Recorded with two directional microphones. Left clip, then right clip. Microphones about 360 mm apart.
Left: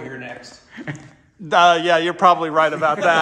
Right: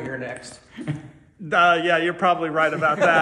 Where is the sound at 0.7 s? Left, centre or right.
Left.